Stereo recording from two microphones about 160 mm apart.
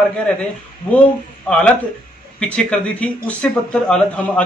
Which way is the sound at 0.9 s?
10° left (ahead or behind).